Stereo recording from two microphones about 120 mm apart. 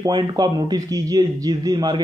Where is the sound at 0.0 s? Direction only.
35° right (ahead or behind).